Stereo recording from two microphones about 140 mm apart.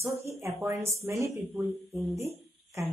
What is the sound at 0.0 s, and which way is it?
Speech, 20° right (ahead or behind).